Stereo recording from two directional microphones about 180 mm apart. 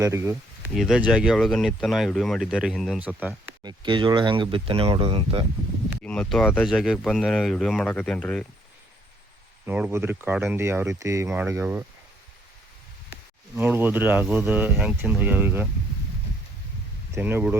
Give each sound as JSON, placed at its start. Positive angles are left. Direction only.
{"t": 0.0, "sound": "speech", "side_deg": -15}
{"t": 0.7, "sound": "speech", "side_deg": 0}
{"t": 3.6, "sound": "speech", "side_deg": -25}
{"t": 6.0, "sound": "speech", "side_deg": 5}
{"t": 9.6, "sound": "speech", "side_deg": -10}
{"t": 13.6, "sound": "speech", "side_deg": -10}
{"t": 17.2, "sound": "speech", "side_deg": -10}